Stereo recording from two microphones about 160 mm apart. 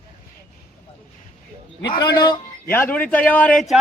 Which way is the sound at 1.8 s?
30° left (ahead or behind).